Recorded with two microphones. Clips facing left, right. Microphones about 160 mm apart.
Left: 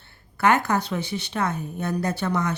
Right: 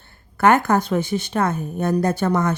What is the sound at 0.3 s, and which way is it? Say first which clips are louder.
Speech: right 5 dB; 50° right (ahead or behind).